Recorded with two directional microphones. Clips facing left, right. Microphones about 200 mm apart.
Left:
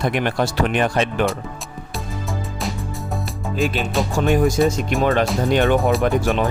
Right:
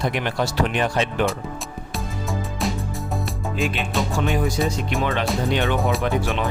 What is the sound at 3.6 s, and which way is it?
Music, centre (ahead or behind).